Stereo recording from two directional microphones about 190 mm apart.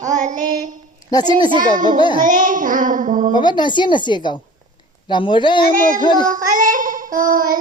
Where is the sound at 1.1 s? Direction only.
20° left (ahead or behind).